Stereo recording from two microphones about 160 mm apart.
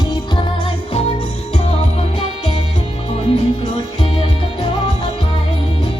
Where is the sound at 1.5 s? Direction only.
40° left (ahead or behind).